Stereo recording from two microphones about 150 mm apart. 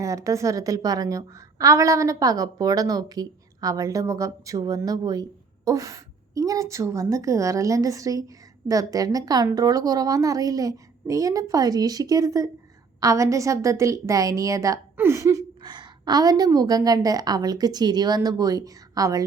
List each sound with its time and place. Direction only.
0.0 s a woman's voice: 20° right (ahead or behind)